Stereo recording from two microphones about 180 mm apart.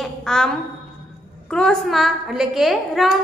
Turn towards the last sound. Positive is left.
turn(degrees=0)  # may be behind; listen again after turning